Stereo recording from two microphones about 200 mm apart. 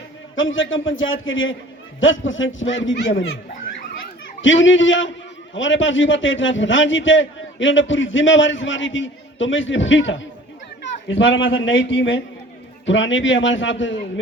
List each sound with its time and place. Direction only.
0.3 s a man's voice: 75° left (ahead or behind)
4.4 s a man's voice: 70° left (ahead or behind)